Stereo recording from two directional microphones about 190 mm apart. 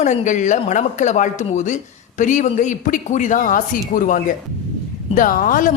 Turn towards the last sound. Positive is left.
turn(degrees=45)  # may be behind; listen again after turning